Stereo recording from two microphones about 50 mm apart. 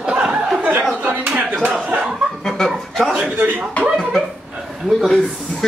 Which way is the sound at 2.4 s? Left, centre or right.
Centre.